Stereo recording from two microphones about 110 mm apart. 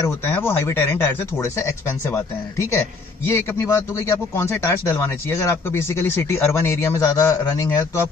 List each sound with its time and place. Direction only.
0.3 s speech: 20° left (ahead or behind)